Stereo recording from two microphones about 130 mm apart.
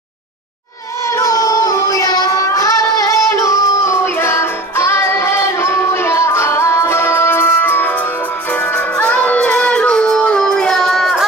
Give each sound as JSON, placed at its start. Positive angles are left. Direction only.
{"t": 1.0, "sound": "child singing", "side_deg": 25}